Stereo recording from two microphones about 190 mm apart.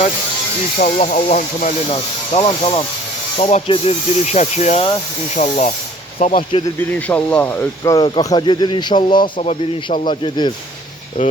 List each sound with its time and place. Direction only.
0.8 s speech: 40° left (ahead or behind)
6.7 s speech: 10° left (ahead or behind); by 10.5 s 25° left (ahead or behind)